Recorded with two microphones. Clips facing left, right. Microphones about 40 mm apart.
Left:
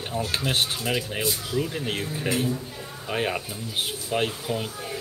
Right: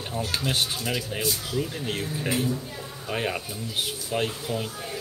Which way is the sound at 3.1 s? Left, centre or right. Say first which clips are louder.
Left 2 dB; centre.